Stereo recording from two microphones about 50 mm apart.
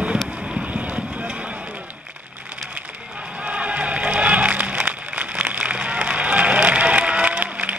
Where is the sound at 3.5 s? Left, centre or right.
Right.